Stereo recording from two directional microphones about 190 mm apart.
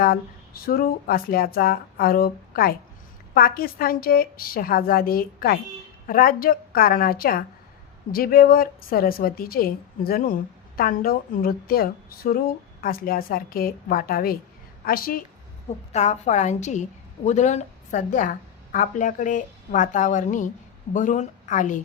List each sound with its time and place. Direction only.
0.0 s speech: 50° left (ahead or behind)
15.9 s a woman's voice: 35° left (ahead or behind)